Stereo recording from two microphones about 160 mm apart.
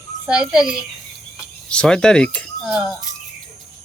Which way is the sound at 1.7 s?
5° left (ahead or behind).